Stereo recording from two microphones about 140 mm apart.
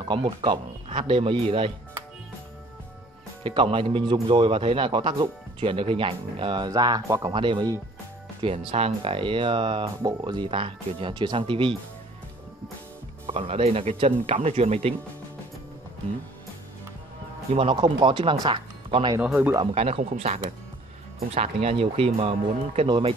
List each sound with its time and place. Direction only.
0.0 s a man's voice: 35° right (ahead or behind)
3.4 s a man's voice: 40° right (ahead or behind)
13.3 s speech: 45° right (ahead or behind)
17.6 s a man's voice: 40° right (ahead or behind)
19.2 s speech: 10° right (ahead or behind)
19.6 s speech: 45° right (ahead or behind)
21.4 s a man's voice: 45° right (ahead or behind)